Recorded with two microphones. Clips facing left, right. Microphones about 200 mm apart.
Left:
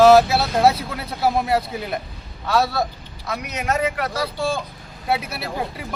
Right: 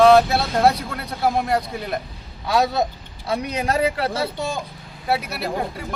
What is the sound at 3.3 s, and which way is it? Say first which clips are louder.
Speech: right 2 dB; 30° right (ahead or behind).